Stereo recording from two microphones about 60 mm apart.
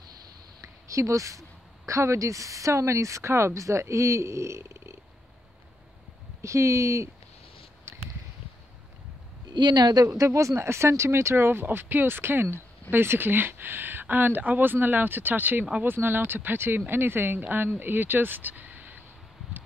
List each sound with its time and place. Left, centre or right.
0.6 s a sound: right
1.9 s speech: right
6.4 s speech: right
10.0 s speech: right